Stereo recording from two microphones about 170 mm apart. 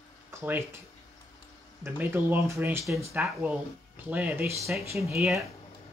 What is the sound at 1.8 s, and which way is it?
Speech, 15° right (ahead or behind).